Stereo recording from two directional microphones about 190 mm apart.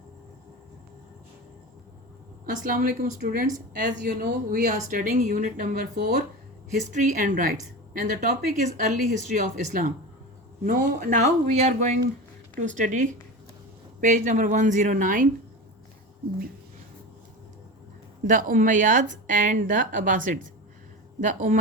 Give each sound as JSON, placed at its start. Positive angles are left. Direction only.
{"t": 2.6, "sound": "a woman's voice", "side_deg": -45}
{"t": 18.3, "sound": "a woman's voice", "side_deg": -45}